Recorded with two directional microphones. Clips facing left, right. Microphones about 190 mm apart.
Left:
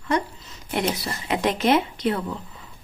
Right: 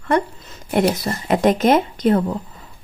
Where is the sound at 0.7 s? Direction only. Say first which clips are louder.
Right 7 dB; 45° right (ahead or behind).